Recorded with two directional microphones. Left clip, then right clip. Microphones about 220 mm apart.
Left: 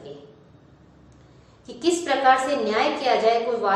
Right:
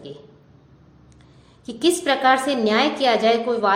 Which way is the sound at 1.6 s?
55° right (ahead or behind).